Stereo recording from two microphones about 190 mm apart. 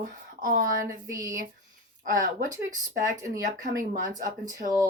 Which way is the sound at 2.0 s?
45° right (ahead or behind).